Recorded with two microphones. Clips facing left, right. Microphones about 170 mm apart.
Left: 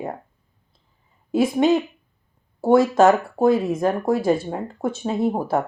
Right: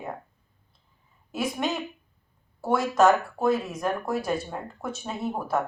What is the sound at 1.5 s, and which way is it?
Speech, 30° left (ahead or behind).